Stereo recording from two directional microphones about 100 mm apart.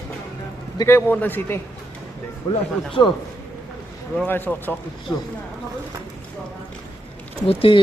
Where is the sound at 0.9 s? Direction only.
20° left (ahead or behind).